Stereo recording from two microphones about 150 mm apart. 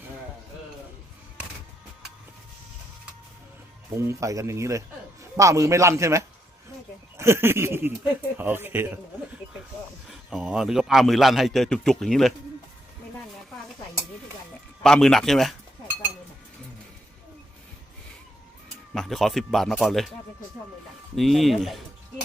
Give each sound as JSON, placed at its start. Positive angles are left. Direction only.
{"t": 3.9, "sound": "a man's voice", "side_deg": -20}
{"t": 7.2, "sound": "chuckle", "side_deg": -15}
{"t": 10.1, "sound": "a man's voice", "side_deg": -5}
{"t": 14.8, "sound": "a man's voice", "side_deg": 5}
{"t": 18.9, "sound": "a man's voice", "side_deg": 0}
{"t": 21.2, "sound": "a man's voice", "side_deg": 0}